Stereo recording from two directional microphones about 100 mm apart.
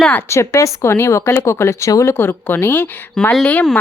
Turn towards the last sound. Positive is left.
turn(degrees=10)  # may be behind; listen again after turning